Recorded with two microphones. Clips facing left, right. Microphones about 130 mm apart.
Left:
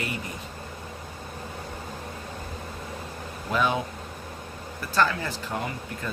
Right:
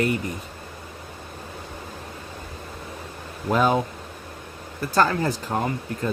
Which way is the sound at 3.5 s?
40° right (ahead or behind).